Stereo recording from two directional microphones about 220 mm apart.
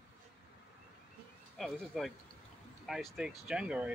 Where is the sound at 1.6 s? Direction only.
Centre (ahead or behind).